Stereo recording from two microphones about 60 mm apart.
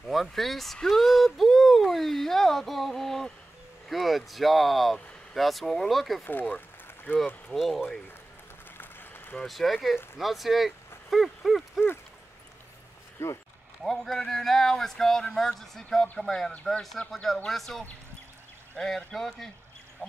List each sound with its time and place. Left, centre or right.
0.3 s speech: centre
0.7 s a sound: centre
3.9 s speech: centre
7.1 s speech: left
7.5 s speech: centre
8.7 s a sound: left
9.5 s speech: centre
13.2 s speech: left
13.8 s speech: centre